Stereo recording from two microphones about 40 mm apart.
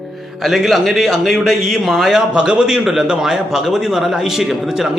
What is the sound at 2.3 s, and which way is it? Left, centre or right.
Speech, centre.